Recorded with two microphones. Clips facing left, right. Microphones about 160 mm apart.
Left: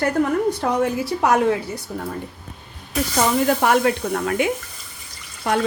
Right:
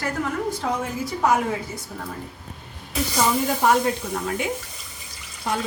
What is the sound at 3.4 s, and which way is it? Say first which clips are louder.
A woman's voice: left 4 dB; 75° left (ahead or behind).